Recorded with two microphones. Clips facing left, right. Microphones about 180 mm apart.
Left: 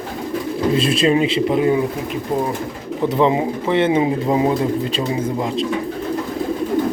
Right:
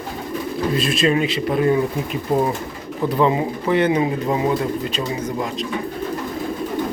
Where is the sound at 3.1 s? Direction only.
20° left (ahead or behind).